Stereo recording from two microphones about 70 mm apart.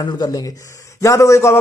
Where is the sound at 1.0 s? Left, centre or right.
Left.